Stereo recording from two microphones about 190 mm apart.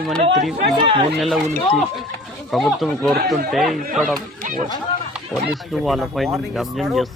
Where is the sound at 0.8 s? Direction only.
25° right (ahead or behind).